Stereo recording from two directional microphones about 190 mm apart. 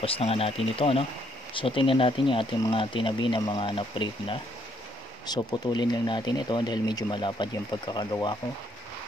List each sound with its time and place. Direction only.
0.0 s speech: 30° left (ahead or behind)